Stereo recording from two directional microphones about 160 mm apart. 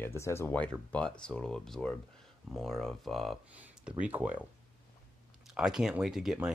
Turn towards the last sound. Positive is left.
turn(degrees=-5)  # may be behind; listen again after turning